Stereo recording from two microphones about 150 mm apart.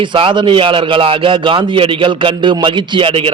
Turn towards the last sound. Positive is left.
turn(degrees=-35)  # may be behind; listen again after turning